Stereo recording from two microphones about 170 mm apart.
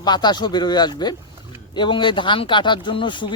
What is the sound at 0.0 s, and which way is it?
Speech, 25° left (ahead or behind).